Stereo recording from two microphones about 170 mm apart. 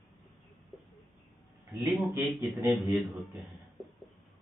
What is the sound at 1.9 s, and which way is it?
Speech, centre (ahead or behind).